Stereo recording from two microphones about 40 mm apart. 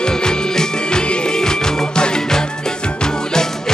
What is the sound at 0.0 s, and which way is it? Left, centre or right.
Music, centre.